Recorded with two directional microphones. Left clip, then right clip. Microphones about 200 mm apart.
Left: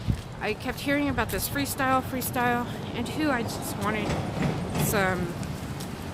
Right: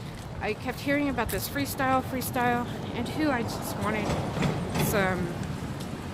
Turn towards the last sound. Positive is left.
turn(degrees=5)  # may be behind; listen again after turning